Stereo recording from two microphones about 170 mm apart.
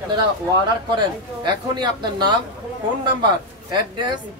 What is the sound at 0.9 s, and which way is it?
Speech, 25° right (ahead or behind).